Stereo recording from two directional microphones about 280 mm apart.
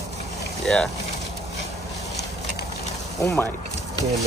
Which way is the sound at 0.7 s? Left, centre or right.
Centre.